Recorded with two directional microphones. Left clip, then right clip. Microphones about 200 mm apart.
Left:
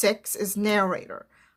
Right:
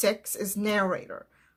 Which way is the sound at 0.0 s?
30° left (ahead or behind).